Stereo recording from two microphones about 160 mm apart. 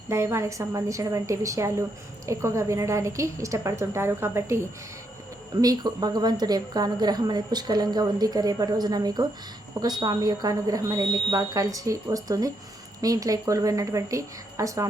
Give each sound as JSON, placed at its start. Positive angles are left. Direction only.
{"t": 0.1, "sound": "a woman's voice", "side_deg": -15}